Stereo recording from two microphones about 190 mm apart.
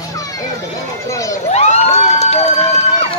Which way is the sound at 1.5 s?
35° left (ahead or behind).